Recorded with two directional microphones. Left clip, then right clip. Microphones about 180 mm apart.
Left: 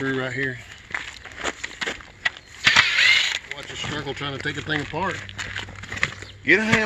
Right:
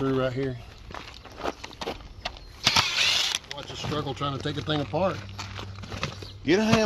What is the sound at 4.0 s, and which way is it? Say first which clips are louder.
Speech: left 1 dB; 30° right (ahead or behind).